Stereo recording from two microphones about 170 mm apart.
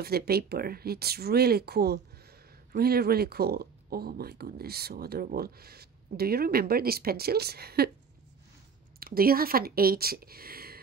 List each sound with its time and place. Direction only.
0.0 s speech: 65° right (ahead or behind)
9.0 s speech: 60° right (ahead or behind)